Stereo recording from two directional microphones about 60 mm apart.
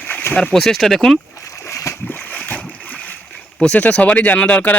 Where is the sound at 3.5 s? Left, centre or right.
Left.